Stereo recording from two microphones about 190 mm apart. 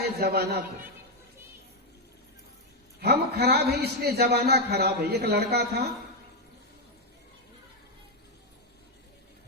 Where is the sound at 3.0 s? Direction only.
60° right (ahead or behind).